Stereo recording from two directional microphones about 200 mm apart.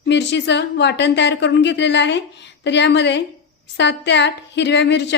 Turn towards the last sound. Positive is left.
turn(degrees=60)  # may be behind; listen again after turning